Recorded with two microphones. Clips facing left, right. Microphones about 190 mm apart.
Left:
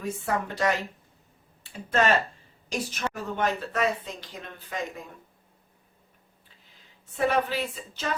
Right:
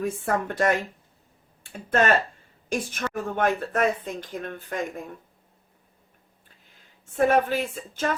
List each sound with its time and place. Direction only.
0.0 s a woman's voice: 50° right (ahead or behind)
7.0 s a woman's voice: 50° right (ahead or behind)